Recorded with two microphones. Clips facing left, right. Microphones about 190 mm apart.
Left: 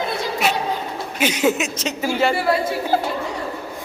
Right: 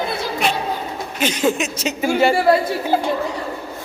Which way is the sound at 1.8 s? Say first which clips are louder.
Right 3 dB; 10° right (ahead or behind).